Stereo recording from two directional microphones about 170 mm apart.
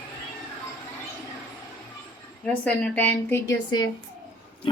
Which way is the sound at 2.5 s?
10° left (ahead or behind).